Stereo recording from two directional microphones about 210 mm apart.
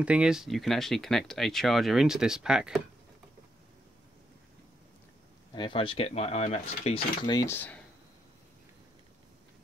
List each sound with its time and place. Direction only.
0.0 s speech: 5° right (ahead or behind)
5.5 s speech: 25° left (ahead or behind)
7.3 s speech: 10° left (ahead or behind)